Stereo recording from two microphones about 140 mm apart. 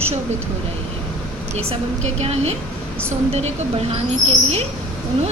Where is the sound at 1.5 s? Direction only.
50° right (ahead or behind).